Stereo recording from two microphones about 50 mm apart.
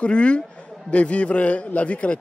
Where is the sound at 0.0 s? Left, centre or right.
Left.